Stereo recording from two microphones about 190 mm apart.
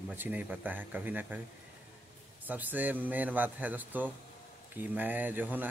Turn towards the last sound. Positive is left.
turn(degrees=-10)  # may be behind; listen again after turning